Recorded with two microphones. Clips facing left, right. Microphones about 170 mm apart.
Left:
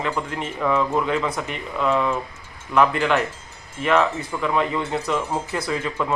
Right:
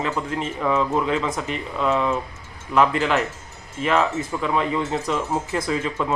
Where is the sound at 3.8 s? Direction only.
5° right (ahead or behind).